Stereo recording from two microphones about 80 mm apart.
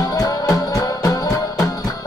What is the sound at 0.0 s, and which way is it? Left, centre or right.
Music, left.